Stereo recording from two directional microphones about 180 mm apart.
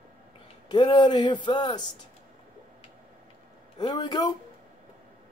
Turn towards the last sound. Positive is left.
turn(degrees=20)  # may be behind; listen again after turning